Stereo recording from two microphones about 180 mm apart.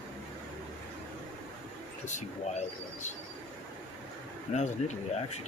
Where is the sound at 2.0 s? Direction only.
40° left (ahead or behind).